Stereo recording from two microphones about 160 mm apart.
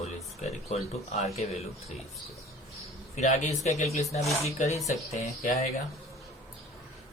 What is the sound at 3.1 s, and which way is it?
Speech, 45° left (ahead or behind).